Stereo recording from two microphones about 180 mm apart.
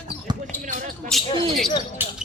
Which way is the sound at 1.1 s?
Centre (ahead or behind).